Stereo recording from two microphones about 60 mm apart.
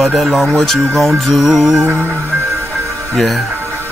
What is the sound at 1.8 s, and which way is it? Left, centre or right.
Music, right.